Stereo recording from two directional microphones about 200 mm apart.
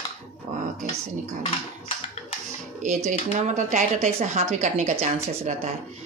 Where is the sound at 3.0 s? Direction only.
40° right (ahead or behind).